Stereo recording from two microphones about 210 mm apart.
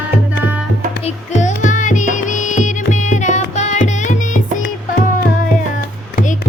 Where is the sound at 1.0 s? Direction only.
35° left (ahead or behind).